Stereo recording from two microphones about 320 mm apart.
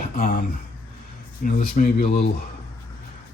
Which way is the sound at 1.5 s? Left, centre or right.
Left.